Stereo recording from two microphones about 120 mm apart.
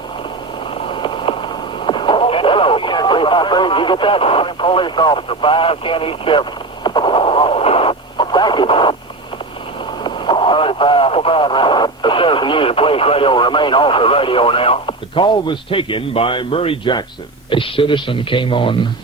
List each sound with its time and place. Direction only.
0.7 s a sound: 45° left (ahead or behind)
1.9 s radio: 45° left (ahead or behind)
10.0 s radio: 40° left (ahead or behind)
17.5 s speech: 45° left (ahead or behind)